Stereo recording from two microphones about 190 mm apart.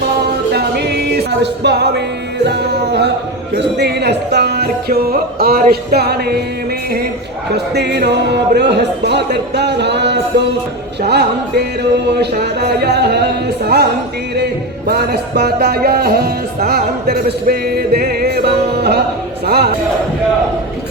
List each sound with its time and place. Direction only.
0.5 s music: 60° right (ahead or behind)
7.5 s music: 60° right (ahead or behind)
14.8 s music: 60° right (ahead or behind)